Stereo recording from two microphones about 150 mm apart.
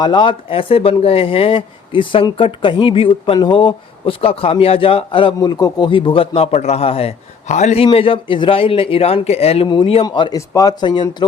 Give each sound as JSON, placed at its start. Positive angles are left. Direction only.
{"t": 0.0, "sound": "speech", "side_deg": 30}